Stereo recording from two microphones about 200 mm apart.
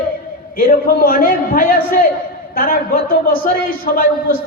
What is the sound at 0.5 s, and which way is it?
A man's voice, 45° left (ahead or behind).